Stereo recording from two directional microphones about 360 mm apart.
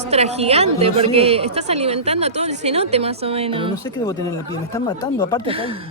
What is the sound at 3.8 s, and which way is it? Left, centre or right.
Speech, centre.